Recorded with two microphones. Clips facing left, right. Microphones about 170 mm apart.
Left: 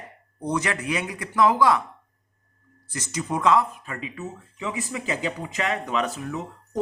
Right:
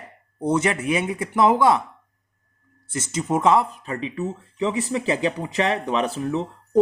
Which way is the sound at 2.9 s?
25° right (ahead or behind).